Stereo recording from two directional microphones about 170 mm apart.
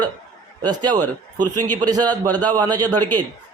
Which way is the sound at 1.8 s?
25° right (ahead or behind).